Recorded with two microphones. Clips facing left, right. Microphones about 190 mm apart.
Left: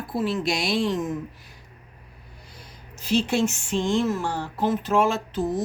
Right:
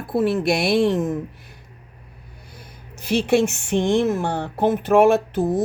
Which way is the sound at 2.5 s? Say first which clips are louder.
Right 4 dB; 60° right (ahead or behind).